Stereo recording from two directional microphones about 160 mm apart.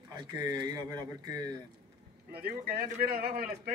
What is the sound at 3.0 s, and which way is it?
Speech, 75° right (ahead or behind).